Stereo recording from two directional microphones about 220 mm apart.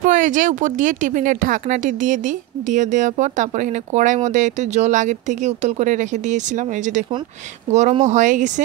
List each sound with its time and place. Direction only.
0.0 s speech: 35° right (ahead or behind)